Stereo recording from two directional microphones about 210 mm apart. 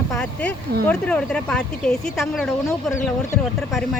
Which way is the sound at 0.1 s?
5° left (ahead or behind).